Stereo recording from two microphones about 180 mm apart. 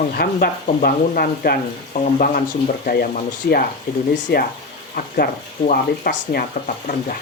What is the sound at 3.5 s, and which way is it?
Speech, 65° left (ahead or behind).